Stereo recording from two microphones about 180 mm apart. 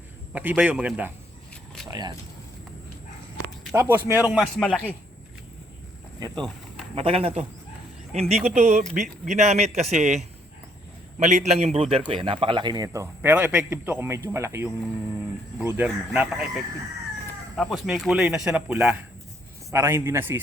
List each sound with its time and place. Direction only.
0.3 s speech: 10° right (ahead or behind)
1.9 s speech: 25° right (ahead or behind)
3.8 s speech: 15° right (ahead or behind)
4.3 s a man's voice: 5° left (ahead or behind)
6.1 s speech: 20° right (ahead or behind)
6.9 s a man's voice: 30° right (ahead or behind); by 20.4 s 10° right (ahead or behind)